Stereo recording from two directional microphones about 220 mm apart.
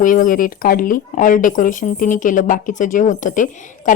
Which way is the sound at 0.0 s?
35° left (ahead or behind).